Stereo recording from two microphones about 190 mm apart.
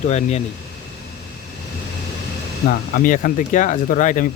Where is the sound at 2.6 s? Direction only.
50° left (ahead or behind).